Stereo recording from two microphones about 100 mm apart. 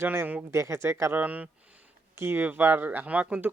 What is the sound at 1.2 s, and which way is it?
Speech, 15° right (ahead or behind).